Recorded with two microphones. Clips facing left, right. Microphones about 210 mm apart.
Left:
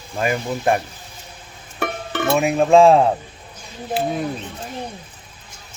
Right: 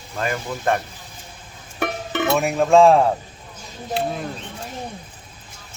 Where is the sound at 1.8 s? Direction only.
20° right (ahead or behind).